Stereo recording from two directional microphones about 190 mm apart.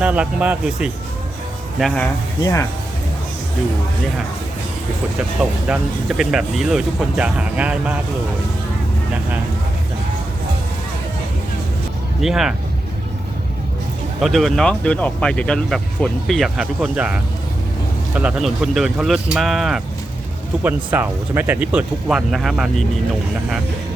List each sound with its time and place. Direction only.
0.0 s speech: 5° right (ahead or behind)
2.4 s speech: 15° left (ahead or behind)
5.4 s speech: 5° right (ahead or behind)
12.2 s speech: 5° right (ahead or behind)
14.2 s speech: centre (ahead or behind)